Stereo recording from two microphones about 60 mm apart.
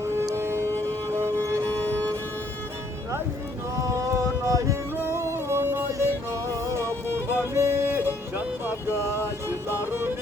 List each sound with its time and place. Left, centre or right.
0.3 s music: right
3.8 s music: right
6.7 s music: right
7.1 s music: right
7.6 s music: right
9.6 s music: right